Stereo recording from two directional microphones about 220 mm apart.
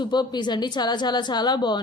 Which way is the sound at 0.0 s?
20° left (ahead or behind).